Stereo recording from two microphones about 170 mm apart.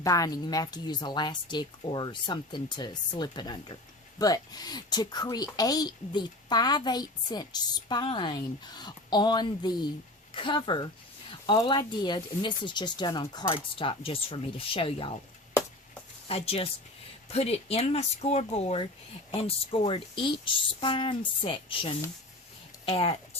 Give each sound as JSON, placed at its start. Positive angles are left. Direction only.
{"t": 0.0, "sound": "a woman's voice", "side_deg": 20}
{"t": 16.2, "sound": "speech", "side_deg": 35}